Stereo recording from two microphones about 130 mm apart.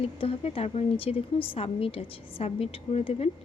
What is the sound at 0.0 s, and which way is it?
A woman's voice, 45° left (ahead or behind).